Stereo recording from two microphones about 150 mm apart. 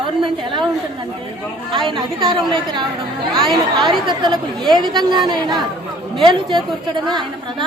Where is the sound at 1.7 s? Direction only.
30° right (ahead or behind).